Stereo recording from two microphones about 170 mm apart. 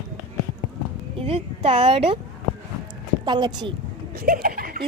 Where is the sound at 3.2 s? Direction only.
25° right (ahead or behind).